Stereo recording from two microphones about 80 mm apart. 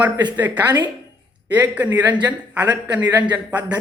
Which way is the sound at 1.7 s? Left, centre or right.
Right.